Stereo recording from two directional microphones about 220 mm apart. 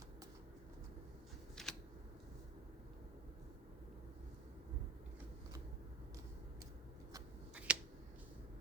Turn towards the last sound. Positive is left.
turn(degrees=-5)  # may be behind; listen again after turning